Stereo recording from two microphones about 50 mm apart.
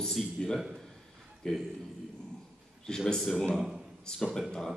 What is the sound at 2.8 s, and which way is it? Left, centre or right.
Speech, centre.